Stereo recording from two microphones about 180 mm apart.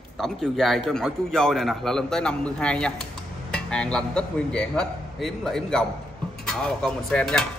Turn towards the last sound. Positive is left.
turn(degrees=5)  # may be behind; listen again after turning